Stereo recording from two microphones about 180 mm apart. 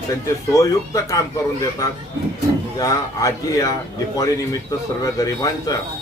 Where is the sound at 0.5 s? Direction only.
20° left (ahead or behind).